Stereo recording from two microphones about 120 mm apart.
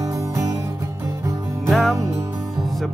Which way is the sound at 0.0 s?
30° right (ahead or behind).